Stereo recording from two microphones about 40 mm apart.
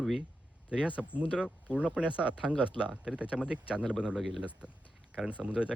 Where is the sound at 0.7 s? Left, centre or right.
Right.